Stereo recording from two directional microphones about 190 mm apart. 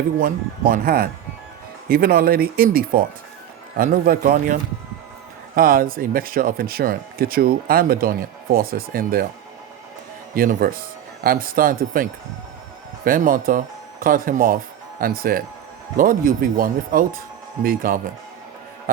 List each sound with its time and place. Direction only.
0.2 s speech: 45° right (ahead or behind)
10.3 s speech: 50° right (ahead or behind)
13.1 s speech: 45° right (ahead or behind)